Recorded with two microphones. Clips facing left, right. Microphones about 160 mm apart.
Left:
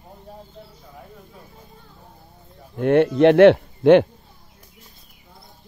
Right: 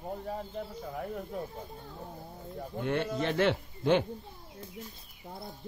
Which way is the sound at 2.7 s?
65° left (ahead or behind).